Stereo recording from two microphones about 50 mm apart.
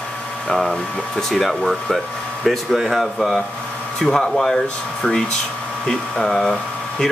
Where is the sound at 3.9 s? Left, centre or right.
Centre.